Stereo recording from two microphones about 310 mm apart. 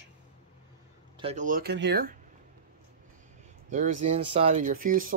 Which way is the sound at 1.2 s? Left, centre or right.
Right.